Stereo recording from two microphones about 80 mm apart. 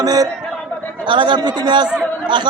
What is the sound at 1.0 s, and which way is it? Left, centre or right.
Speech, right.